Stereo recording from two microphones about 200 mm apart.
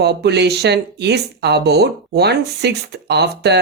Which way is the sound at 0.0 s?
55° right (ahead or behind).